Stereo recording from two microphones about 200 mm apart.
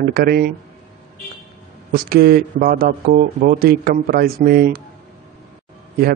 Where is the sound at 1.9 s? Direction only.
50° right (ahead or behind).